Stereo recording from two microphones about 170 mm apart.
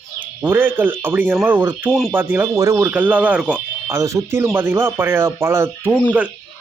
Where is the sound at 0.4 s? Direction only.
15° right (ahead or behind).